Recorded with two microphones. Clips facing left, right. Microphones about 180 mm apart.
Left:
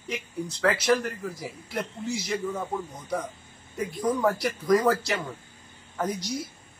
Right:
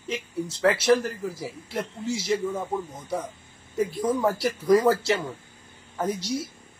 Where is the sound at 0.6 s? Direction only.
25° right (ahead or behind).